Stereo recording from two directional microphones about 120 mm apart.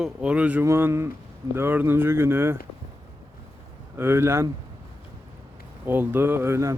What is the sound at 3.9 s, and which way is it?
Speech, 20° right (ahead or behind).